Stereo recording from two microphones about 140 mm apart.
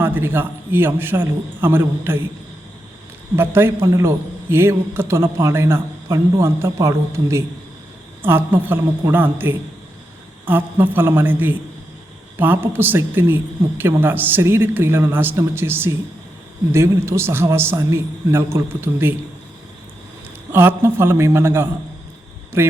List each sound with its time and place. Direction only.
0.0 s a man's voice: 15° right (ahead or behind)
3.3 s a man's voice: 15° right (ahead or behind)
20.5 s a man's voice: 15° right (ahead or behind)